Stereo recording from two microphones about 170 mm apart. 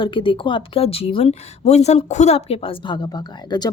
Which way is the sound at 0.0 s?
30° left (ahead or behind).